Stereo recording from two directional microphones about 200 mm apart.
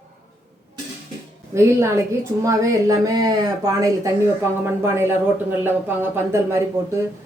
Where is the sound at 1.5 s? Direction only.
15° right (ahead or behind).